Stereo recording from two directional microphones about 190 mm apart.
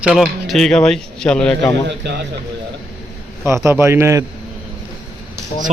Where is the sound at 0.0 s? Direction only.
Centre (ahead or behind).